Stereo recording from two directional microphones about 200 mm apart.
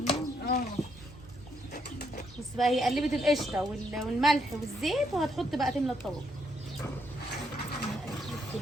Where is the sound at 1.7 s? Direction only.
45° left (ahead or behind).